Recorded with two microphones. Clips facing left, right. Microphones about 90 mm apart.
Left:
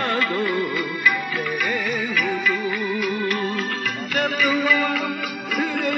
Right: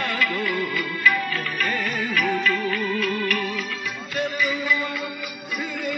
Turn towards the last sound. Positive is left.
turn(degrees=90)